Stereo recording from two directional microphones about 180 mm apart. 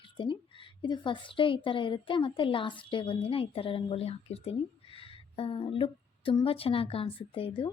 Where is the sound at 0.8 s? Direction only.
25° left (ahead or behind).